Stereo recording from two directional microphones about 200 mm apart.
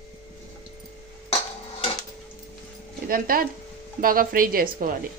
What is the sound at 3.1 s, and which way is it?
A woman's voice, 45° right (ahead or behind).